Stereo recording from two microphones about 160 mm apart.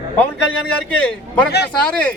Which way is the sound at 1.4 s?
90° left.